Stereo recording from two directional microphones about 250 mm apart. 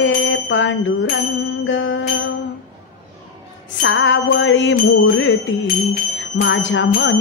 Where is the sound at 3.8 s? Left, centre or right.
Left.